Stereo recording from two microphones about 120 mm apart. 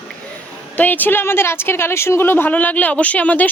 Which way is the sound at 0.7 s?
15° left (ahead or behind).